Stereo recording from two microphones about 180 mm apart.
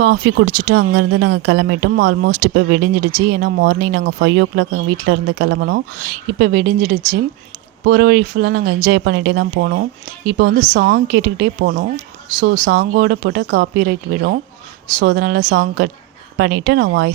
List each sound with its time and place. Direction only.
0.0 s speech: 80° right
14.9 s speech: 60° right (ahead or behind)
16.4 s speech: 75° right (ahead or behind)